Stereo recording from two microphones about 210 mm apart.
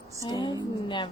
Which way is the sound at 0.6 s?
25° left (ahead or behind).